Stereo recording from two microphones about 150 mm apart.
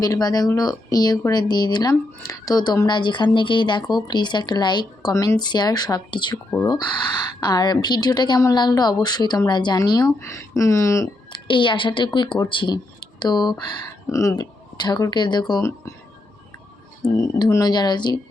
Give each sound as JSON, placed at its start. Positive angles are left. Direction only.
{"t": 0.0, "sound": "speech", "side_deg": 25}
{"t": 5.1, "sound": "speech", "side_deg": 15}
{"t": 5.4, "sound": "speech", "side_deg": 30}
{"t": 6.3, "sound": "speech", "side_deg": 15}
{"t": 7.4, "sound": "speech", "side_deg": 25}
{"t": 11.3, "sound": "a woman's voice", "side_deg": 35}
{"t": 17.0, "sound": "speech", "side_deg": 30}